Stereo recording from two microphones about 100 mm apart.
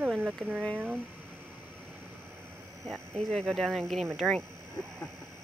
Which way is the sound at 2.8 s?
Centre (ahead or behind).